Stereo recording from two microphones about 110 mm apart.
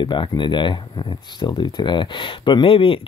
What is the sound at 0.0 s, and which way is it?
Speech, 40° left (ahead or behind).